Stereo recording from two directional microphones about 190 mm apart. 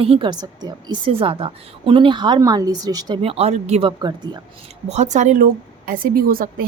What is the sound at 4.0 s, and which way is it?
Speech, 20° right (ahead or behind).